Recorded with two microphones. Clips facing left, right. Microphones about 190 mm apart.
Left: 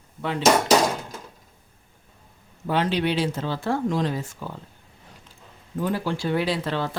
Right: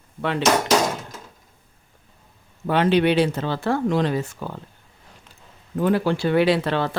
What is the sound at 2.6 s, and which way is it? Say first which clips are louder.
Speech: right 5 dB; 60° right (ahead or behind).